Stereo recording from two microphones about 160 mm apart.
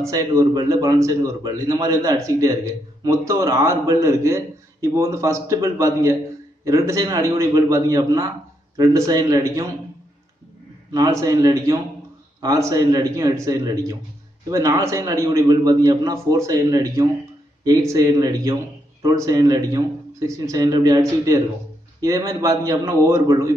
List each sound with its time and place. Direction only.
0.4 s a man's voice: 25° right (ahead or behind)
10.9 s a man's voice: 20° right (ahead or behind)